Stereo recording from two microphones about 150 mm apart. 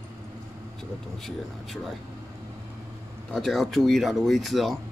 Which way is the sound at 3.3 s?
Centre (ahead or behind).